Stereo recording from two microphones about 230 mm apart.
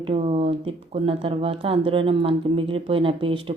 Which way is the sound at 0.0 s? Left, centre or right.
Right.